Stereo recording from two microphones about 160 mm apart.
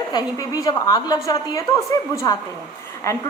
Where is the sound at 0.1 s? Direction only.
25° left (ahead or behind).